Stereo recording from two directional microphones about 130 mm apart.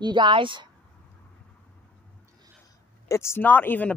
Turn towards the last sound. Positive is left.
turn(degrees=15)  # may be behind; listen again after turning